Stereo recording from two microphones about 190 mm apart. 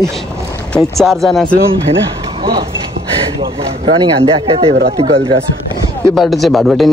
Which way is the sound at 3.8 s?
30° right (ahead or behind).